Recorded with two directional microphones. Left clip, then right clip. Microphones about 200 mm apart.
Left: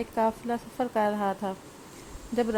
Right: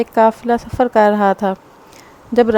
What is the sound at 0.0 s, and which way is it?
Speech, 45° right (ahead or behind).